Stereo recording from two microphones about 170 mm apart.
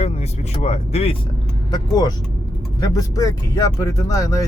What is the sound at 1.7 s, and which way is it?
A man's voice, 25° left (ahead or behind).